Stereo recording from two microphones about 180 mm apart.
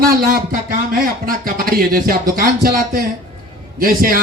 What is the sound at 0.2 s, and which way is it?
Speech, 55° right (ahead or behind).